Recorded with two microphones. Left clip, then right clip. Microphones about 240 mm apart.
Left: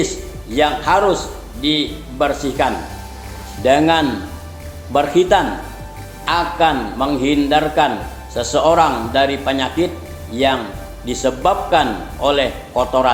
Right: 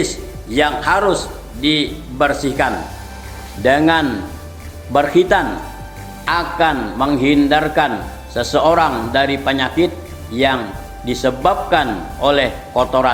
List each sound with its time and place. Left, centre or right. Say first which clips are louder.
0.5 s a man's voice: even; right